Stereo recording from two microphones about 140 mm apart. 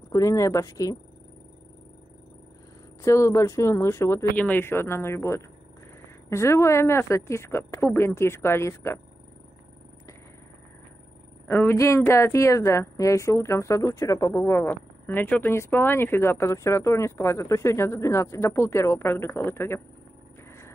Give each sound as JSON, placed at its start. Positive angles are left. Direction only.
{"t": 0.1, "sound": "speech", "side_deg": 20}
{"t": 3.0, "sound": "speech", "side_deg": 20}
{"t": 11.4, "sound": "speech", "side_deg": 15}